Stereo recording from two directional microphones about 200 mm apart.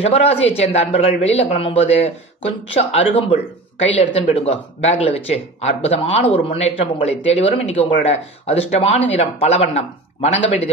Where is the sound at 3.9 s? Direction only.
30° left (ahead or behind).